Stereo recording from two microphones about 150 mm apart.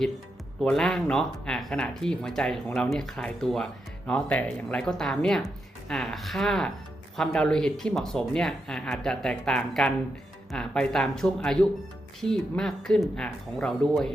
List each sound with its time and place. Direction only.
0.6 s speech: 5° left (ahead or behind)